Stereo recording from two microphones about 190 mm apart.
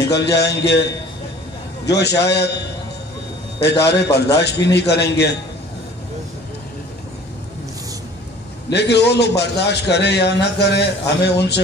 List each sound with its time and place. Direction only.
0.0 s a man's voice: 65° left (ahead or behind)
1.9 s a man's voice: 60° left (ahead or behind)
3.6 s a man's voice: 65° left (ahead or behind)
8.7 s a man's voice: 65° left (ahead or behind)